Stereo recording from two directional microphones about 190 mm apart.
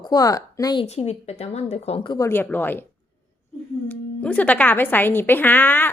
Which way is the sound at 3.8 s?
10° left (ahead or behind).